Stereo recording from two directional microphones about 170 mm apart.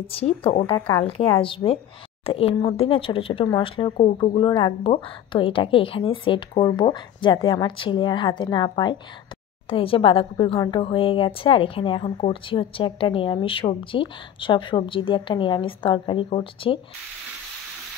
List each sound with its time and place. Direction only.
0.0 s a woman's voice: 35° left (ahead or behind)